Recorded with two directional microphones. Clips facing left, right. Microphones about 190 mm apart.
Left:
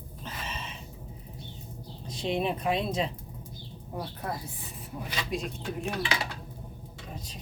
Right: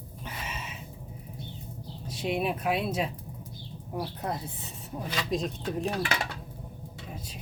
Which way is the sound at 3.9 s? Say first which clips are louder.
Right 2 dB; 20° right (ahead or behind).